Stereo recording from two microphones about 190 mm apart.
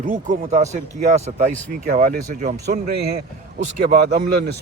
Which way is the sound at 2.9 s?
60° right (ahead or behind).